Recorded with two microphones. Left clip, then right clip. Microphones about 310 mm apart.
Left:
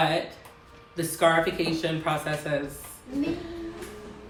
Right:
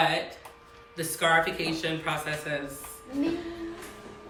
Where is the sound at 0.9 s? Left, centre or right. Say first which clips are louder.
Left 2 dB; centre.